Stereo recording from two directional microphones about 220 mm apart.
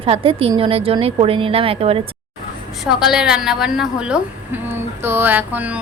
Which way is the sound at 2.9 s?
Centre (ahead or behind).